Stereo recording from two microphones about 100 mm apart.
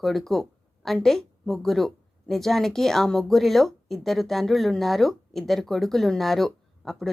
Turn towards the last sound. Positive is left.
turn(degrees=5)  # may be behind; listen again after turning